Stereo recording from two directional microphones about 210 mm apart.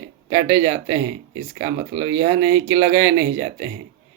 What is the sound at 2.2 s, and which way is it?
Speech, 20° right (ahead or behind).